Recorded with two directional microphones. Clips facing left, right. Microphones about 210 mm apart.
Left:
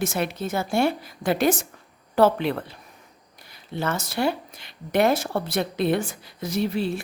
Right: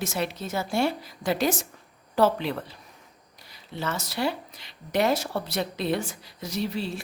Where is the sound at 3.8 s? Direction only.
50° left (ahead or behind).